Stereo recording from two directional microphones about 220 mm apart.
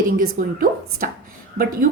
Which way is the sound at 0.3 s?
40° right (ahead or behind).